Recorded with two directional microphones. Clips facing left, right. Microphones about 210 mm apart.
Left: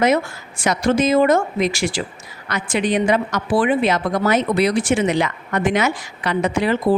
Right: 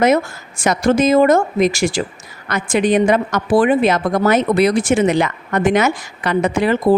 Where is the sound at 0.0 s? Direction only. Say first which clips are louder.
Right 3 dB; 45° right (ahead or behind).